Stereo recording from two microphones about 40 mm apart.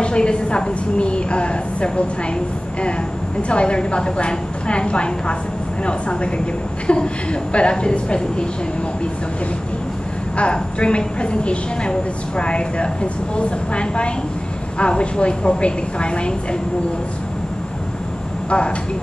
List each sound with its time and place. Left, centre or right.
0.0 s a woman's voice: left
3.4 s a woman's voice: left
10.3 s a woman's voice: left